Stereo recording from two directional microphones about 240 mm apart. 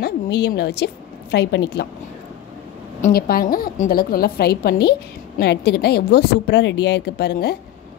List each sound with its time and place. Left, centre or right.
0.0 s a woman's voice: left
3.0 s a woman's voice: left